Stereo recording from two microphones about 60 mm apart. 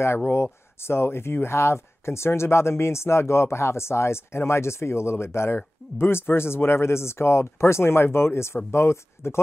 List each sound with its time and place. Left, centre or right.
0.3 s speech: left